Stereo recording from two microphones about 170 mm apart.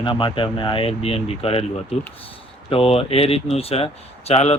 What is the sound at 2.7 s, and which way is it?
Speech, 35° left (ahead or behind).